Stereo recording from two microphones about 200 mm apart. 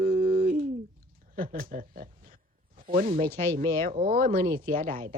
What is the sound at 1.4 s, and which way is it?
Speech, 45° right (ahead or behind).